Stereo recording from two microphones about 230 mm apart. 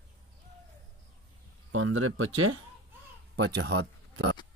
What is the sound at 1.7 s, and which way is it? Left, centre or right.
Speech, right.